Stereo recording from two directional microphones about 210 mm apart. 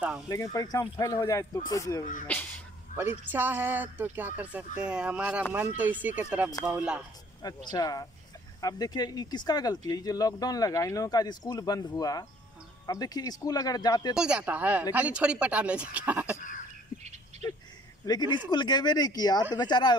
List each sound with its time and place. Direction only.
0.3 s speech: 15° left (ahead or behind)
3.3 s speech: 10° right (ahead or behind)
7.4 s speech: 20° left (ahead or behind)
14.1 s speech: 5° right (ahead or behind)
18.0 s speech: 20° left (ahead or behind)